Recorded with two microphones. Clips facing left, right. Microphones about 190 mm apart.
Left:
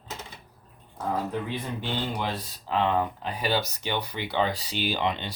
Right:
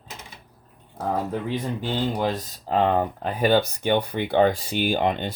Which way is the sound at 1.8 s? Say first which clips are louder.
Right 6 dB; 45° right (ahead or behind).